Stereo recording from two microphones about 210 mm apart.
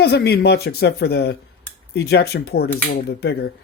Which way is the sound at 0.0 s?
50° left (ahead or behind).